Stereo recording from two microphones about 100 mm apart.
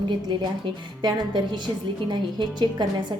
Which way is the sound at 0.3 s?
50° right (ahead or behind).